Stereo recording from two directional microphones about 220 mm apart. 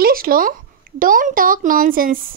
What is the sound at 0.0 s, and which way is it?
A woman's voice, 40° right (ahead or behind).